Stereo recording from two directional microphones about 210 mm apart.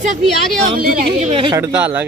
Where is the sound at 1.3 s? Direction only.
25° right (ahead or behind).